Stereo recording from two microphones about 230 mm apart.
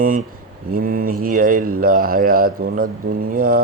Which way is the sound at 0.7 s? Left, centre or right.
Right.